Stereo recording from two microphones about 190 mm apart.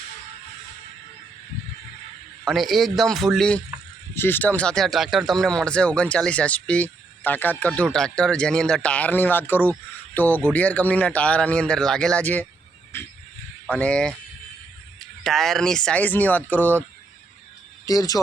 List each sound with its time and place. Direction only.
2.4 s speech: centre (ahead or behind)
13.7 s speech: 10° left (ahead or behind)
15.2 s speech: centre (ahead or behind)
17.8 s speech: 20° left (ahead or behind)